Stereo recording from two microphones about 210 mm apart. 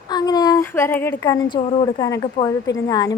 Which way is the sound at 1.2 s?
20° left (ahead or behind).